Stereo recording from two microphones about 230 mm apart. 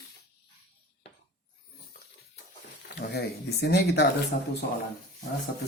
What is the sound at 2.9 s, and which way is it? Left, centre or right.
Speech, left.